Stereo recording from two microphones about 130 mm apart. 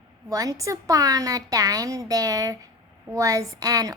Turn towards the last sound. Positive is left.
turn(degrees=-25)  # may be behind; listen again after turning